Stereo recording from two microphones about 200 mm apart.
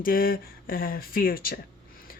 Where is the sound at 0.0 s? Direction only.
45° left (ahead or behind).